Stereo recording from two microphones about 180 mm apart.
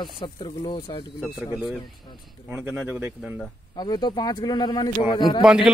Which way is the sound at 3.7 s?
25° left (ahead or behind).